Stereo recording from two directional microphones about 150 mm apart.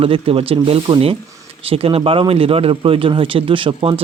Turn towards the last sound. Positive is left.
turn(degrees=-35)  # may be behind; listen again after turning